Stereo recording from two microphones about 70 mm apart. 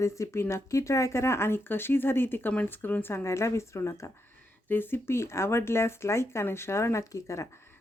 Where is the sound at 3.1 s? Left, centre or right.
Left.